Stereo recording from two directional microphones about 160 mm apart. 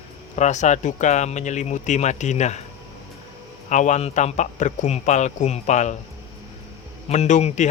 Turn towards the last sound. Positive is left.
turn(degrees=50)  # may be behind; listen again after turning